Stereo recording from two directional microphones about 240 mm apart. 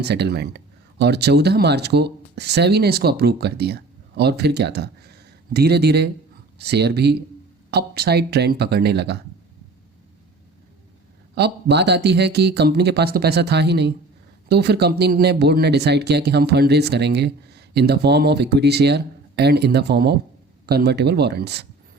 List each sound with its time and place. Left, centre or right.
0.0 s speech: right
11.3 s speech: right